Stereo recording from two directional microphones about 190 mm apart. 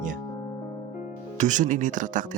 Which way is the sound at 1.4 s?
40° right (ahead or behind).